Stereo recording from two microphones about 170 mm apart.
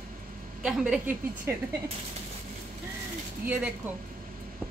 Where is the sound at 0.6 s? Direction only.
5° right (ahead or behind).